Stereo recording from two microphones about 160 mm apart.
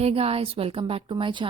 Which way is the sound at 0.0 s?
40° right (ahead or behind).